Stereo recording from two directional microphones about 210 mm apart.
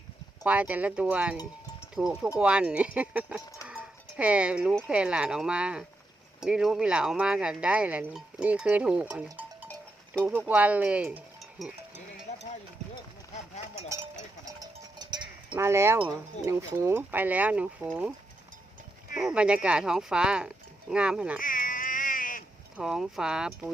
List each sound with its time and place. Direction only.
0.4 s speech: 5° right (ahead or behind)
12.3 s run: 30° left (ahead or behind)
14.4 s cowbell: 20° right (ahead or behind)
16.0 s speech: 15° right (ahead or behind)
19.1 s speech: 5° right (ahead or behind)
21.3 s sheep: 40° left (ahead or behind)
22.8 s speech: centre (ahead or behind)